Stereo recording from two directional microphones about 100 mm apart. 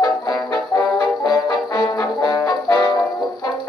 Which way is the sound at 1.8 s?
40° left (ahead or behind).